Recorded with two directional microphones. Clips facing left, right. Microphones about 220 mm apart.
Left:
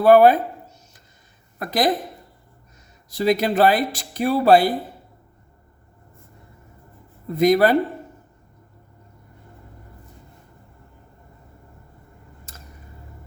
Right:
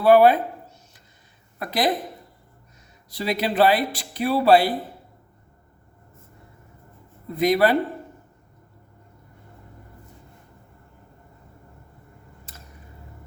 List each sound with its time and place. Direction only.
0.0 s speech: 45° left (ahead or behind)
1.5 s speech: 45° left (ahead or behind)
3.1 s speech: 45° left (ahead or behind)
7.3 s speech: 45° left (ahead or behind)